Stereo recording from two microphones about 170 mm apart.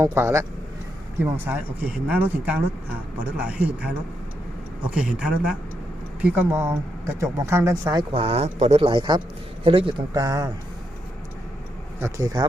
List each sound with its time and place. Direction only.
0.0 s speech: 15° right (ahead or behind)
4.9 s speech: 5° right (ahead or behind)
8.1 s speech: 35° right (ahead or behind)
10.2 s speech: 20° right (ahead or behind)
11.9 s speech: 15° right (ahead or behind)